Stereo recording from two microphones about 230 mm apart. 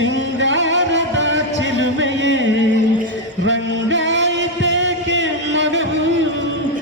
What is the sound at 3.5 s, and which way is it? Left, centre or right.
Music, right.